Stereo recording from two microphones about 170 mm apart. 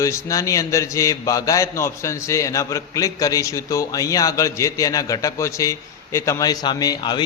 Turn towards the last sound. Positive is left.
turn(degrees=25)  # may be behind; listen again after turning